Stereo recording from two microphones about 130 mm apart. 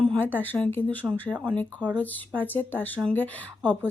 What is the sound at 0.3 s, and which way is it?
Speech, 15° left (ahead or behind).